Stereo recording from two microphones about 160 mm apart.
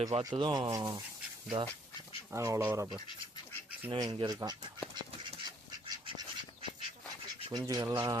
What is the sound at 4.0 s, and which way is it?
Mantra, 25° right (ahead or behind).